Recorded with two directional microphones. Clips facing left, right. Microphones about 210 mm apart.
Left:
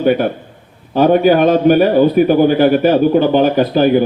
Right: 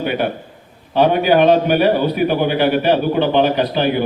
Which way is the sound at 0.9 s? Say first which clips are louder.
Left 3 dB; 45° left (ahead or behind).